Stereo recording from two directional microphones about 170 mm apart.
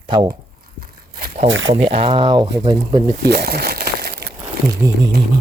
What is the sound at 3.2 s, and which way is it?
Crumpling, 70° right (ahead or behind).